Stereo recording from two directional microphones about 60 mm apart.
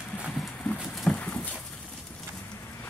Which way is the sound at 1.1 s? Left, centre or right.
Left.